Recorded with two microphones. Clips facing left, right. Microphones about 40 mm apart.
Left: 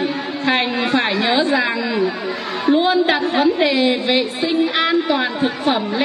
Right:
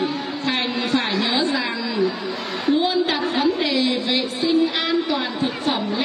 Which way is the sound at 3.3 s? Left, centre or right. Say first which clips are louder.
Left 5 dB; left.